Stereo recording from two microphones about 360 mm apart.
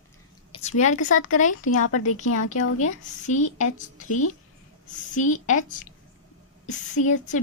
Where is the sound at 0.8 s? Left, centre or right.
Left.